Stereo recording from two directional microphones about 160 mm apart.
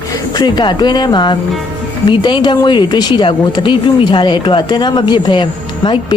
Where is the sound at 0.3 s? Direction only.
25° left (ahead or behind).